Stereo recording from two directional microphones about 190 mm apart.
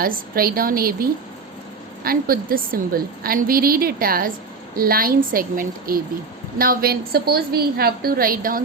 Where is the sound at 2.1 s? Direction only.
50° right (ahead or behind).